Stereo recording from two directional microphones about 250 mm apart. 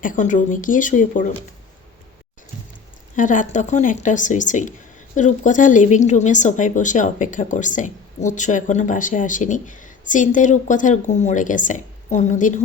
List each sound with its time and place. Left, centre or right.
0.0 s a woman's voice: left
3.2 s a woman's voice: left